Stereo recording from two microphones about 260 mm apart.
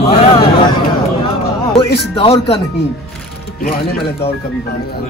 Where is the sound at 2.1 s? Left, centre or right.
Left.